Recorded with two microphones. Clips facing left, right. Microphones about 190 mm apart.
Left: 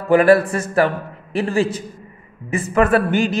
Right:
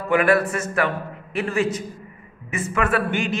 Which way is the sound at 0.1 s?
35° left (ahead or behind).